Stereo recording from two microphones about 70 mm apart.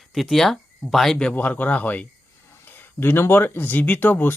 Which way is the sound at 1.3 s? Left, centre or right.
Left.